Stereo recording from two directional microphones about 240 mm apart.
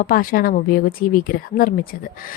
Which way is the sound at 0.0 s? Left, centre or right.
Left.